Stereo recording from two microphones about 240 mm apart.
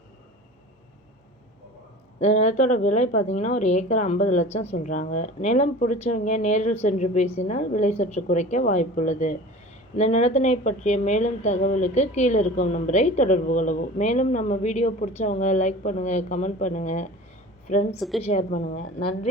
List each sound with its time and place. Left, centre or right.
2.1 s speech: left
17.9 s a woman's voice: centre
18.2 s speech: left